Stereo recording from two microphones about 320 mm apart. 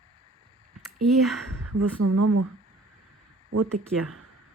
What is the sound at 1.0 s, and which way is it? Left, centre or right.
Speech, centre.